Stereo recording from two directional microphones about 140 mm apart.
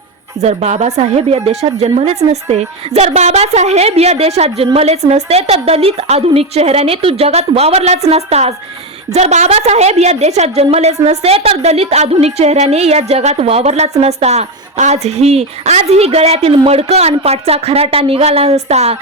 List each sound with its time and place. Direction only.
0.3 s a woman's voice: 50° right (ahead or behind)